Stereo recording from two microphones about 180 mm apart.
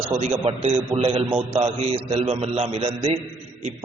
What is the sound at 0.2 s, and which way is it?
A man's voice, 35° right (ahead or behind).